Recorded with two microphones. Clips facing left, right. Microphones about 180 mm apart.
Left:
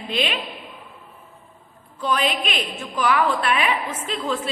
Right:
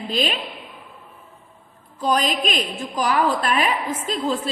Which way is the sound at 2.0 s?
40° right (ahead or behind).